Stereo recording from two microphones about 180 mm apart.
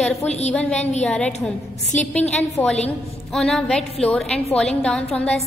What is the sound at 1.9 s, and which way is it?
Speech, 40° left (ahead or behind).